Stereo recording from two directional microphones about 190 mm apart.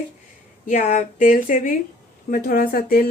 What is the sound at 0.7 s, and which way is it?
Speech, 40° left (ahead or behind).